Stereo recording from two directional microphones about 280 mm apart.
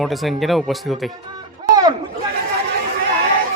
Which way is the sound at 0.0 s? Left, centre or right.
Centre.